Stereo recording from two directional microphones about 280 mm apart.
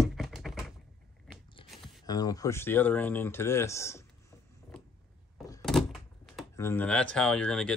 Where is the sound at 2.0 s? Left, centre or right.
Centre.